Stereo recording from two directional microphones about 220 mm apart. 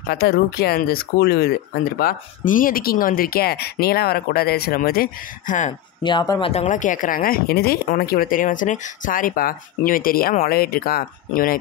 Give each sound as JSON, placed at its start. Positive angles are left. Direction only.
{"t": 0.1, "sound": "speech", "side_deg": 45}
{"t": 6.0, "sound": "speech", "side_deg": 20}
{"t": 6.5, "sound": "speech", "side_deg": 35}